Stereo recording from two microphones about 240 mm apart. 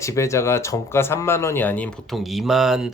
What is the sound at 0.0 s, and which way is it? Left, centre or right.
Speech, centre.